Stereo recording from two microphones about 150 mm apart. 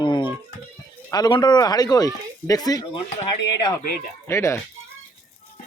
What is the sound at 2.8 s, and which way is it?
Speech, 35° left (ahead or behind).